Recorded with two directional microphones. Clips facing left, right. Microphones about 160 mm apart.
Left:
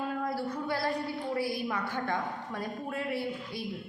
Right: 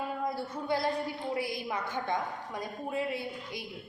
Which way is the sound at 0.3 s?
20° right (ahead or behind).